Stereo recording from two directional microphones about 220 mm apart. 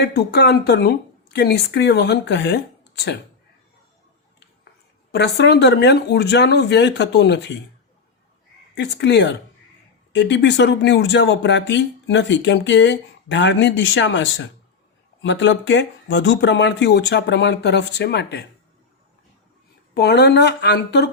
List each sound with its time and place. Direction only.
0.0 s speech: 50° left (ahead or behind)
5.1 s speech: 50° left (ahead or behind)
8.7 s speech: 50° left (ahead or behind)
19.9 s speech: 45° left (ahead or behind)